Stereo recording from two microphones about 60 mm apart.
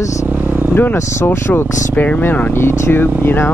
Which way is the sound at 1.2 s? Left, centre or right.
Left.